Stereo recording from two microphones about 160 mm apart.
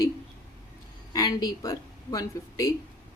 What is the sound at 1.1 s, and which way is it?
Speech, 25° left (ahead or behind).